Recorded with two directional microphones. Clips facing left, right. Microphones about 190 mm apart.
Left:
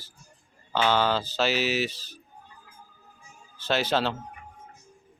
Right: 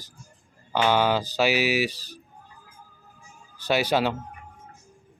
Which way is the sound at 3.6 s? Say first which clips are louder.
Right 3 dB; 10° right (ahead or behind).